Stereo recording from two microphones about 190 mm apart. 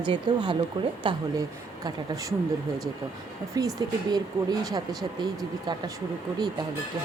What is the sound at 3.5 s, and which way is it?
Speech, 20° right (ahead or behind).